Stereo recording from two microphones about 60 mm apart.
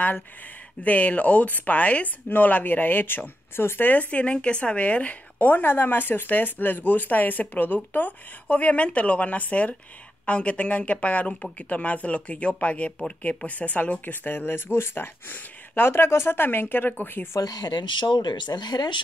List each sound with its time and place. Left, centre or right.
0.8 s speech: left
17.4 s speech: left
18.5 s speech: left